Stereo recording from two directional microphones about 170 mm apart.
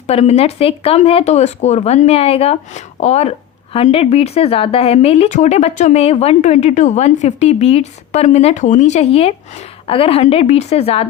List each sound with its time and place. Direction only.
0.1 s speech: 40° left (ahead or behind)